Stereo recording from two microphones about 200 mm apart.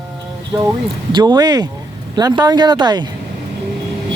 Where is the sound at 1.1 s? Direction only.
20° right (ahead or behind).